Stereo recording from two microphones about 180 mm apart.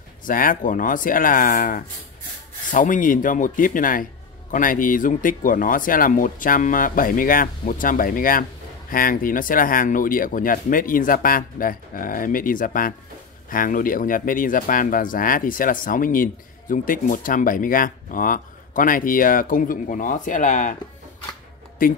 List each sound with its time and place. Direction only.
0.2 s speech: 50° left (ahead or behind)
21.8 s speech: 50° left (ahead or behind)